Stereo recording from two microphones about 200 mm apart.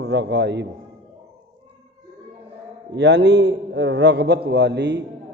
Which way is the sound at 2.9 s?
60° right (ahead or behind).